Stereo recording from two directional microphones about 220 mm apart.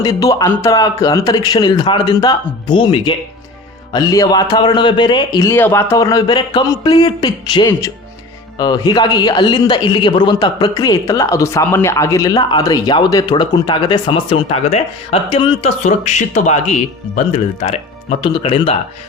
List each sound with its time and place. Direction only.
0.0 s a man's voice: 15° left (ahead or behind)